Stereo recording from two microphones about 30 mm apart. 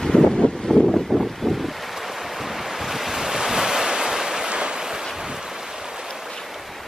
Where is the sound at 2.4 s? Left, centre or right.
Centre; by 4.5 s right.